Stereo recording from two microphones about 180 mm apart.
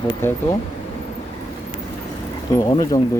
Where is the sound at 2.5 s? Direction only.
20° left (ahead or behind).